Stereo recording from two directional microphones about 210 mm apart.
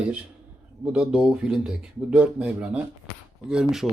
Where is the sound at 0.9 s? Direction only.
5° right (ahead or behind).